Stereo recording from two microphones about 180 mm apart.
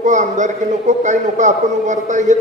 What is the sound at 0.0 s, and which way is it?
A man's voice, 45° right (ahead or behind).